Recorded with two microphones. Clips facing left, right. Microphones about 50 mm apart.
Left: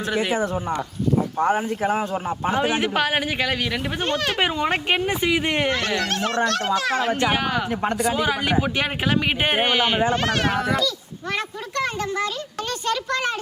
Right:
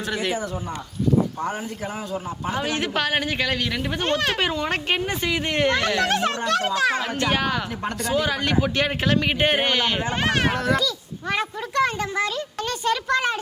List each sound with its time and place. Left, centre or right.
0.1 s a man's voice: centre
1.4 s speech: left
2.6 s a man's voice: centre
4.0 s a child's voice: centre
4.4 s a man's voice: centre
6.0 s a child's voice: centre
7.0 s a man's voice: centre
7.7 s speech: left
7.9 s a man's voice: centre
10.1 s a child's voice: centre
10.5 s a child's voice: centre